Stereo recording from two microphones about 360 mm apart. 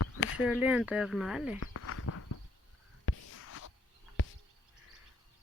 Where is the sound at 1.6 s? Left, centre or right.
Left.